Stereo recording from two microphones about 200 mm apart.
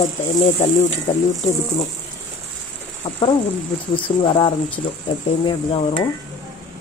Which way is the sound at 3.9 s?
25° left (ahead or behind).